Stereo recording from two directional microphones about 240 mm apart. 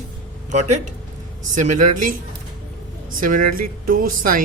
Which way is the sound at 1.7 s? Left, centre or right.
Right.